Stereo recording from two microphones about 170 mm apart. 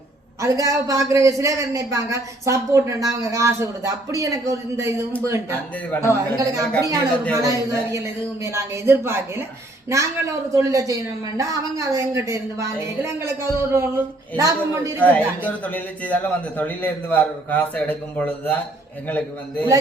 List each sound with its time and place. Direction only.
0.4 s a man's voice: 20° right (ahead or behind)
5.9 s speech: 20° left (ahead or behind)
6.4 s a man's voice: 20° right (ahead or behind)
10.5 s a man's voice: 20° right (ahead or behind)
14.9 s speech: 10° left (ahead or behind)